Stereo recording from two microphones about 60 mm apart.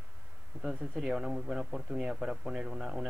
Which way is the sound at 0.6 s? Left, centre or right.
Centre.